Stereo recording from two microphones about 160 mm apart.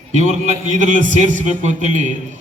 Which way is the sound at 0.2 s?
50° right (ahead or behind).